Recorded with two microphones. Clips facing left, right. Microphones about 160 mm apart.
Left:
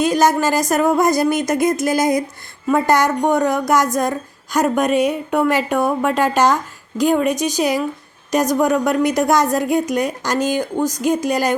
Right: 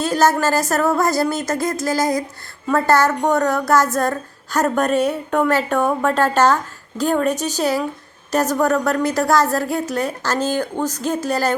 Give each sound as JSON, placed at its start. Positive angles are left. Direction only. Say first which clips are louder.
{"t": 0.0, "sound": "a woman's voice", "louder": "left 1 dB", "side_deg": 15}